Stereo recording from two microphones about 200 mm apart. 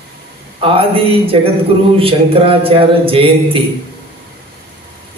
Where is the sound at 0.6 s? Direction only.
25° right (ahead or behind).